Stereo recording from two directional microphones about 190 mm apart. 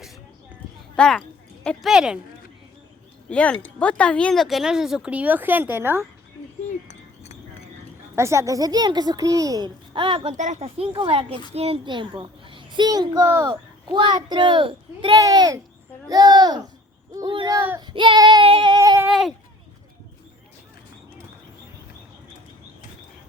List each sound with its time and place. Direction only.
0.9 s speech: 5° left (ahead or behind)
3.2 s speech: 5° left (ahead or behind); by 6.1 s 10° right (ahead or behind)
6.7 s a sound: 35° left (ahead or behind)
8.1 s a child's voice: 15° right (ahead or behind)
10.3 s a child's voice: 40° right (ahead or behind); by 16.6 s 20° right (ahead or behind)
17.2 s child singing: 20° right (ahead or behind)